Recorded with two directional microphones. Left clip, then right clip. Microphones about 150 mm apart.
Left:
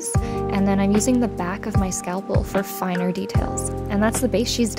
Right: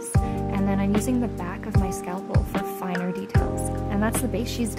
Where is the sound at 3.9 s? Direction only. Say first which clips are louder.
Left 7 dB; 20° left (ahead or behind).